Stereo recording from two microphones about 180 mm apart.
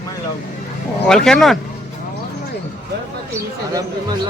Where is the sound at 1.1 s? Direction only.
5° left (ahead or behind).